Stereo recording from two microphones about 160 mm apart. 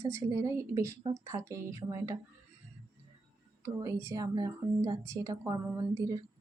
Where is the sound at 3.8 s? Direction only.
20° right (ahead or behind).